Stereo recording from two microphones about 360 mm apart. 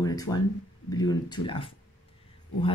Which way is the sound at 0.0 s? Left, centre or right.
Centre.